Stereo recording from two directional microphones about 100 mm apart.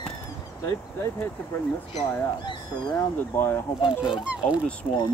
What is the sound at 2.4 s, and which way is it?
Speech, 45° left (ahead or behind).